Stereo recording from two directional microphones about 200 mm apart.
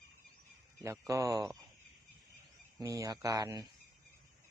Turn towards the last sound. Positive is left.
turn(degrees=-20)  # may be behind; listen again after turning